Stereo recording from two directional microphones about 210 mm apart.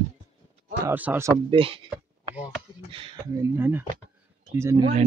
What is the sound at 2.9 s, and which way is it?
Speech, 25° right (ahead or behind).